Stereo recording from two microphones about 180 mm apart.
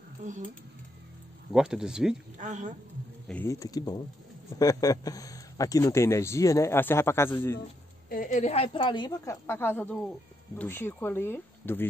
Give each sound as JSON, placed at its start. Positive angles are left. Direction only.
{"t": 0.2, "sound": "speech", "side_deg": -45}
{"t": 1.5, "sound": "speech", "side_deg": -5}
{"t": 2.3, "sound": "speech", "side_deg": -45}
{"t": 3.3, "sound": "a woman's voice", "side_deg": 10}
{"t": 8.1, "sound": "a woman's voice", "side_deg": 45}